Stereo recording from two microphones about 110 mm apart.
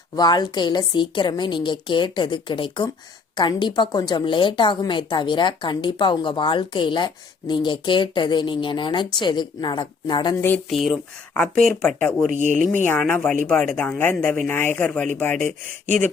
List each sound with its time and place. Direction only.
0.2 s a woman's voice: 40° left (ahead or behind)
10.7 s speech: centre (ahead or behind)